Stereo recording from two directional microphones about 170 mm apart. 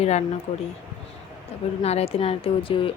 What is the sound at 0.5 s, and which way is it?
Speech, 45° left (ahead or behind).